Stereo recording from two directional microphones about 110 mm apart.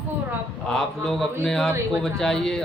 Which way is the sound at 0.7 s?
5° left (ahead or behind).